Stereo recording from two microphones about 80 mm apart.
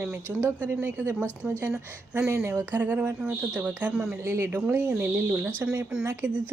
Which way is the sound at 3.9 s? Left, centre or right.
Centre.